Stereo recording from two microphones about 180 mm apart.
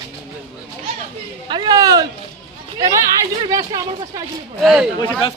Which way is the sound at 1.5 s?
25° right (ahead or behind).